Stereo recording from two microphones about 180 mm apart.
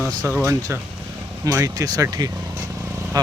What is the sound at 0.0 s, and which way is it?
Speech, 20° right (ahead or behind).